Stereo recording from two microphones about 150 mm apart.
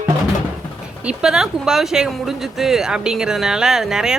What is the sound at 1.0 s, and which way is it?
Speech, 5° right (ahead or behind).